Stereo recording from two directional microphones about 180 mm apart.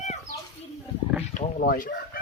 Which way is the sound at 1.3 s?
50° left (ahead or behind).